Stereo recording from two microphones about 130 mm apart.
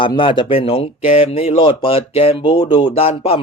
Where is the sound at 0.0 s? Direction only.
40° left (ahead or behind).